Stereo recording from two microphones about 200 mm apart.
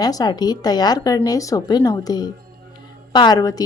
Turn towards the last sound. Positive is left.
turn(degrees=20)  # may be behind; listen again after turning